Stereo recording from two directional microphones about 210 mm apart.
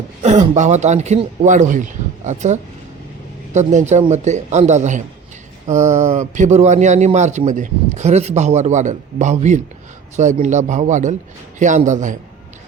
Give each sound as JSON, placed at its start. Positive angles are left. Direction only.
{"t": 0.2, "sound": "a man's voice", "side_deg": -35}